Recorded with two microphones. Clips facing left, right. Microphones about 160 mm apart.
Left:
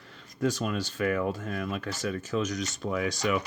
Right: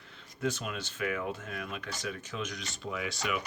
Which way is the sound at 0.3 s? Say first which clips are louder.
Left 6 dB; 40° left (ahead or behind).